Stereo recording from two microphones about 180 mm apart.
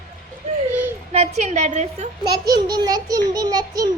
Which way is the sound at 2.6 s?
20° right (ahead or behind).